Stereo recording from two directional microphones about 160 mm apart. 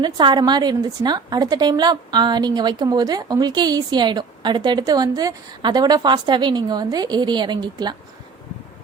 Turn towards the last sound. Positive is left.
turn(degrees=-25)  # may be behind; listen again after turning